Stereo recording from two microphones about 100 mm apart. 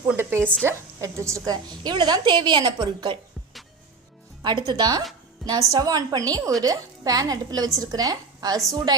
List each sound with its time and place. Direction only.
0.2 s a woman's voice: 20° right (ahead or behind)
1.8 s a woman's voice: 45° right (ahead or behind)
4.4 s a woman's voice: 45° right (ahead or behind)
5.4 s a woman's voice: centre (ahead or behind)
5.7 s speech: 40° right (ahead or behind)